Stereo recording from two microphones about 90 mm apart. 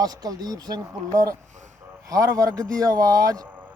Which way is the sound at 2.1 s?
40° right (ahead or behind).